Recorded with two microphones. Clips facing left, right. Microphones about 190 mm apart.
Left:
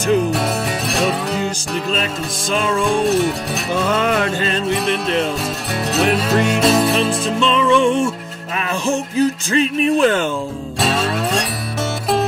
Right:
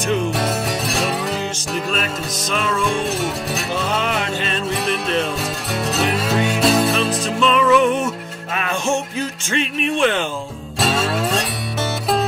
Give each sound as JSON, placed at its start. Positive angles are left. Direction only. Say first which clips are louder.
{"t": 0.3, "sound": "music", "louder": "left 1 dB", "side_deg": 0}
{"t": 2.8, "sound": "music", "louder": "left 5 dB", "side_deg": 0}
{"t": 4.6, "sound": "music", "louder": "left 3 dB", "side_deg": 0}
{"t": 7.4, "sound": "music", "louder": "even", "side_deg": 30}
{"t": 8.6, "sound": "speech", "louder": "left 1 dB", "side_deg": 35}
{"t": 10.8, "sound": "music", "louder": "even", "side_deg": 0}